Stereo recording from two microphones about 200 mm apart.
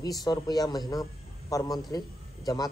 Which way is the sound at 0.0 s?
20° left (ahead or behind).